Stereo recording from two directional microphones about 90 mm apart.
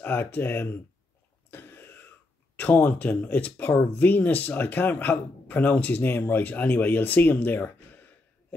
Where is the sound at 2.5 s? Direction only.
20° left (ahead or behind).